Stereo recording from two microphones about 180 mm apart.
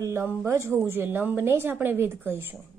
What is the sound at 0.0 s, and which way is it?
A woman's voice, 15° right (ahead or behind).